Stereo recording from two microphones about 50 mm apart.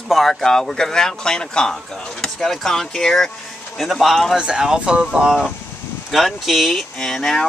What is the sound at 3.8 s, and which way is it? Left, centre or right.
Speech, centre.